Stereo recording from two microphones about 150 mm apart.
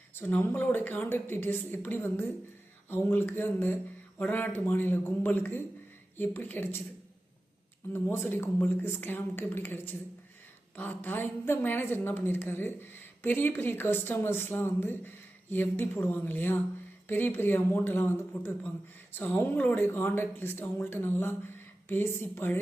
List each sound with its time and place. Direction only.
0.1 s a woman's voice: 15° left (ahead or behind)
7.9 s a woman's voice: 15° left (ahead or behind)